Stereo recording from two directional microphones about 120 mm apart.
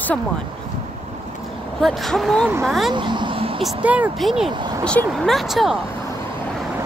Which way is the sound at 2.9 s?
40° right (ahead or behind).